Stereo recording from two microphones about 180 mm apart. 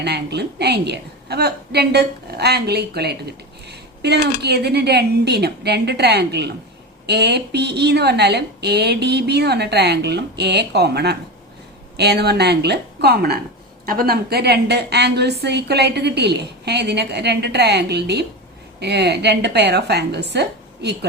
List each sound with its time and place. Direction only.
0.0 s a woman's voice: 65° right (ahead or behind)